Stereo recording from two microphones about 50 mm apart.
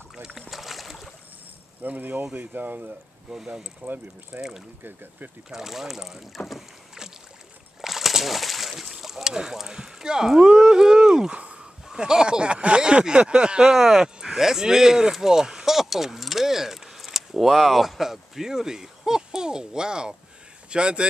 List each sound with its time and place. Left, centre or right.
0.1 s boat: centre
1.8 s speech: right
3.3 s speech: centre
3.8 s speech: right
4.4 s speech: centre
7.8 s slosh: centre
11.9 s speech: centre